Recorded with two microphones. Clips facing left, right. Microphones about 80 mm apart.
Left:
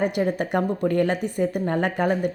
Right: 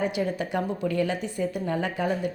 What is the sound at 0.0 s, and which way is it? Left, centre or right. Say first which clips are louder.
A woman's voice: left 4 dB; left.